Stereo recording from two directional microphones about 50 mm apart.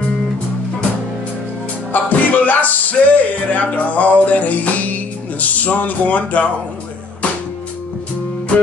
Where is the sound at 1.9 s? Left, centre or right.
Left.